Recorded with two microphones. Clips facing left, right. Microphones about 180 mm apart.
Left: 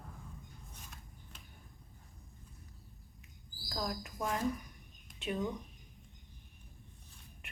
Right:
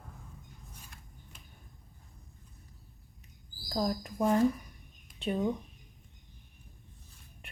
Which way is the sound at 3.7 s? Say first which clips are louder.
Right 7 dB; 35° right (ahead or behind).